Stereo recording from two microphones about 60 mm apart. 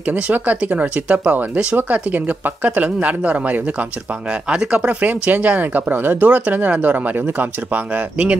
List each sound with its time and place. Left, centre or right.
0.0 s speech: right